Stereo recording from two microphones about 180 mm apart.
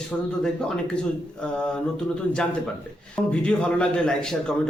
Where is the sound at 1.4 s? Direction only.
5° left (ahead or behind).